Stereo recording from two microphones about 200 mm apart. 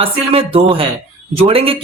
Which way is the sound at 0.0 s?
30° right (ahead or behind).